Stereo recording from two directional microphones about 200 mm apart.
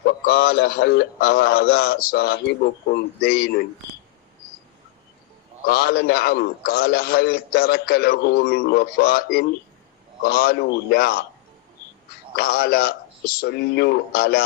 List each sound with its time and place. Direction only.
0.0 s a man's voice: 50° left (ahead or behind)
5.6 s a man's voice: 50° left (ahead or behind)
12.4 s a man's voice: 50° left (ahead or behind)